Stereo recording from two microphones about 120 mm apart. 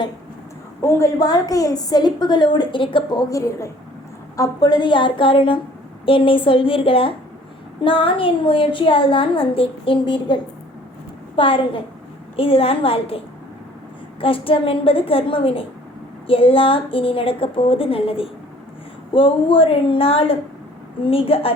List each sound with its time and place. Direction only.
0.8 s a woman's voice: 25° left (ahead or behind); by 21.5 s 50° left (ahead or behind)